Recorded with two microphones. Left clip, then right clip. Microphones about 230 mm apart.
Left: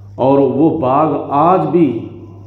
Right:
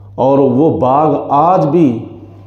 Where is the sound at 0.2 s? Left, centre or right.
Right.